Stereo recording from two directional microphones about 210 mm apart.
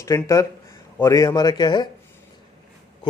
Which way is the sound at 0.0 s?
15° left (ahead or behind).